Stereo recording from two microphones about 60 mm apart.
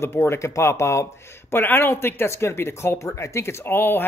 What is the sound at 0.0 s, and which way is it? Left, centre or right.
Speech, left.